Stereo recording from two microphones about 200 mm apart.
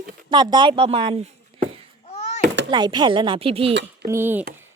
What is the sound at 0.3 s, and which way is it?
Speech, 20° right (ahead or behind).